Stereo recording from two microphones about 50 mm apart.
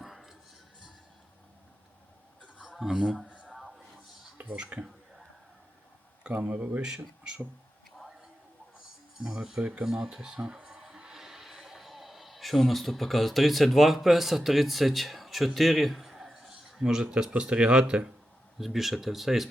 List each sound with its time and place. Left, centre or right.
0.0 s music: centre
3.0 s speech: centre
3.2 s a sound: right
3.5 s a sound: centre
4.5 s speech: right
6.4 s speech: right
6.8 s speech: centre
9.1 s speech: centre
9.8 s speech: centre
18.6 s speech: centre